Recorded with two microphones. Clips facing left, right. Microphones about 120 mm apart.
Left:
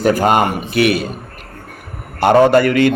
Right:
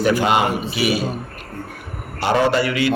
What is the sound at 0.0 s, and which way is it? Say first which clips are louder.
Speech: left 3 dB; 45° left (ahead or behind).